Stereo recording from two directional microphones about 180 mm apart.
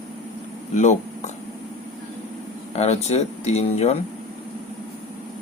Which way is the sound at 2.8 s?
35° left (ahead or behind).